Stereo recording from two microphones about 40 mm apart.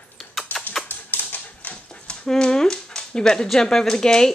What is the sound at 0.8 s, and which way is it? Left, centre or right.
Typewriter, left.